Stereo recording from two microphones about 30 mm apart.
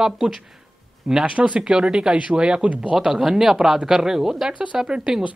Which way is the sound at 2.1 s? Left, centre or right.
Right.